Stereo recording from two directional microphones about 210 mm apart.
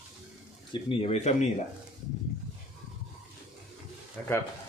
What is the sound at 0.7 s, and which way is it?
Speech, 25° left (ahead or behind).